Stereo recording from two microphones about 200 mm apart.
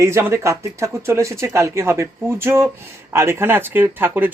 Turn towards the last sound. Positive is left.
turn(degrees=-10)  # may be behind; listen again after turning